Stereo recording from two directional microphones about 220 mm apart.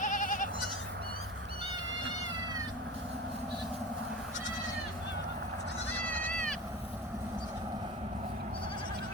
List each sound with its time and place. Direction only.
0.0 s bleat: 35° left (ahead or behind)
6.0 s goat: 10° left (ahead or behind)